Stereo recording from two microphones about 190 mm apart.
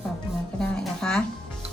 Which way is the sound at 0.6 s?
5° left (ahead or behind).